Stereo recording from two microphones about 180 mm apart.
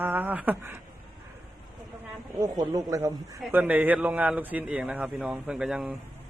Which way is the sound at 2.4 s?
20° right (ahead or behind).